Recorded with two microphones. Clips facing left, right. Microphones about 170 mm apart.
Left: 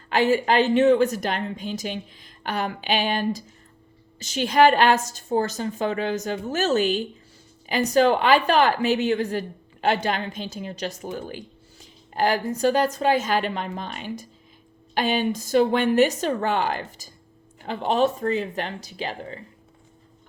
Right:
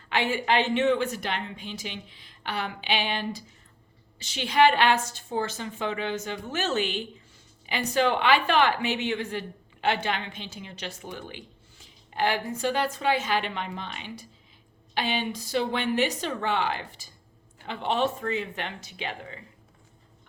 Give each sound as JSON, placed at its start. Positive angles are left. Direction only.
{"t": 0.1, "sound": "a woman's voice", "side_deg": 40}